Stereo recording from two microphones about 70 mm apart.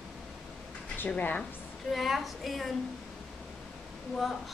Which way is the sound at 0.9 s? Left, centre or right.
Left.